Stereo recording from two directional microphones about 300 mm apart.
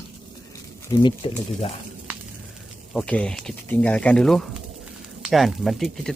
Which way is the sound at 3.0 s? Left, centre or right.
Centre.